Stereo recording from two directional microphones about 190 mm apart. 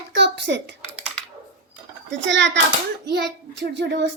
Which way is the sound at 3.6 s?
65° right (ahead or behind).